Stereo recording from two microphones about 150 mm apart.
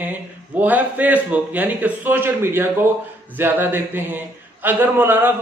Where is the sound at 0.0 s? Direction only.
10° right (ahead or behind).